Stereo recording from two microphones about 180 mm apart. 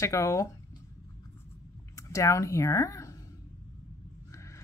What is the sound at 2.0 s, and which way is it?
Speech, 20° left (ahead or behind).